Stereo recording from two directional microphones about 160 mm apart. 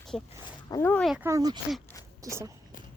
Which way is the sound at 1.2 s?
20° right (ahead or behind).